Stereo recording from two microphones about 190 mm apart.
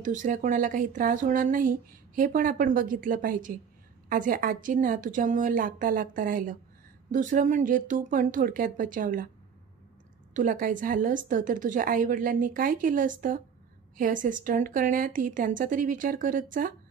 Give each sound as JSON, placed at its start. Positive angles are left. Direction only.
{"t": 0.0, "sound": "speech", "side_deg": -40}
{"t": 10.3, "sound": "speech", "side_deg": -45}